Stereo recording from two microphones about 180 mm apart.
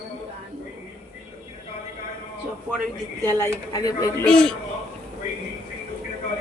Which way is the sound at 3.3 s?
15° left (ahead or behind).